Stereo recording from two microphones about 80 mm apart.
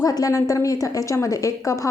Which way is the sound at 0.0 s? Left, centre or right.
Left.